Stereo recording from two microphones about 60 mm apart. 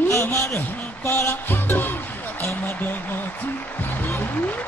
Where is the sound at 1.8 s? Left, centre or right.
Left.